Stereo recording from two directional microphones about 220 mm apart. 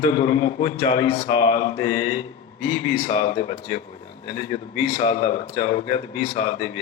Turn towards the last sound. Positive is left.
turn(degrees=30)  # may be behind; listen again after turning